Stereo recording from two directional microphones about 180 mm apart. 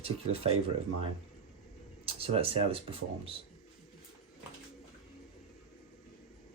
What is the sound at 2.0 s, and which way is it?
Speech, 30° right (ahead or behind).